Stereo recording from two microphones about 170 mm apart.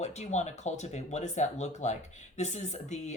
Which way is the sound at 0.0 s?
40° left (ahead or behind).